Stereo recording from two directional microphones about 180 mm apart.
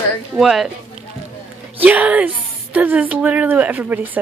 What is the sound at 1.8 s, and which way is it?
A woman's voice, 5° right (ahead or behind).